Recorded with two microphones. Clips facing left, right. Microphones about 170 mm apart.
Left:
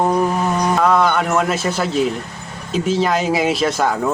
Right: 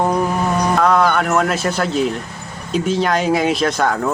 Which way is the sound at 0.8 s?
Centre (ahead or behind).